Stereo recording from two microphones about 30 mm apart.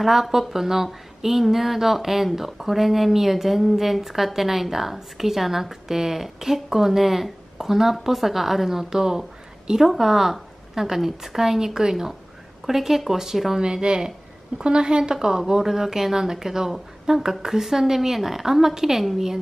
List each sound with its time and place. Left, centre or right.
0.0 s speech: centre
13.6 s a woman's voice: right
14.6 s a woman's voice: right; by 19.0 s centre